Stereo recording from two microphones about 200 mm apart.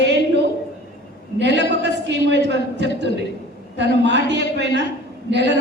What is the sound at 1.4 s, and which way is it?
A woman's voice, 60° right (ahead or behind).